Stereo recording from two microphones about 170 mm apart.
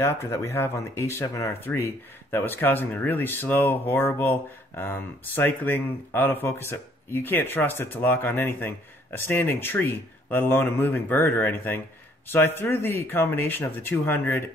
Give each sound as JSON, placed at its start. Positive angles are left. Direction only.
{"t": 0.0, "sound": "speech", "side_deg": 15}